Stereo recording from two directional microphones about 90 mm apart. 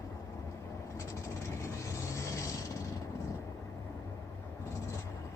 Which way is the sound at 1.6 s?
35° left (ahead or behind).